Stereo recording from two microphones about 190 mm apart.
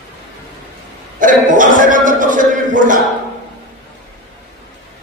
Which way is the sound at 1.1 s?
45° right (ahead or behind).